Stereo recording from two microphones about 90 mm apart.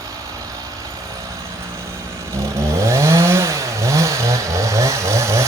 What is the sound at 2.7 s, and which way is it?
Chainsaw, 30° right (ahead or behind).